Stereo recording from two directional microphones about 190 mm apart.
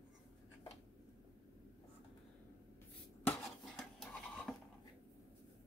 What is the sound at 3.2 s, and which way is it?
Dishes, centre (ahead or behind).